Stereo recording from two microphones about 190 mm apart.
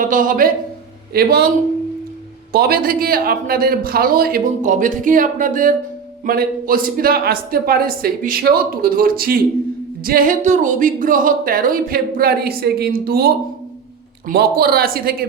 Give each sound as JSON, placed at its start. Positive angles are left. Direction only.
{"t": 0.0, "sound": "speech", "side_deg": -45}
{"t": 2.5, "sound": "speech", "side_deg": -50}